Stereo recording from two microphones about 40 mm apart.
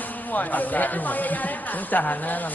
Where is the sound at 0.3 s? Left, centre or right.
Left.